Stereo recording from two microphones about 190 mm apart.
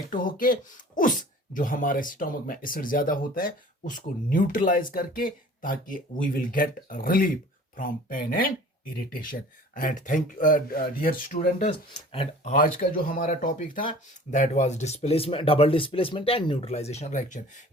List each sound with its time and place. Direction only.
0.1 s speech: 45° left (ahead or behind)
11.7 s speech: 30° left (ahead or behind)
12.5 s speech: 45° left (ahead or behind)